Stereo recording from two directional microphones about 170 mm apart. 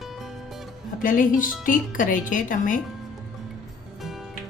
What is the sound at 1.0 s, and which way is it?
A woman's voice, 50° left (ahead or behind).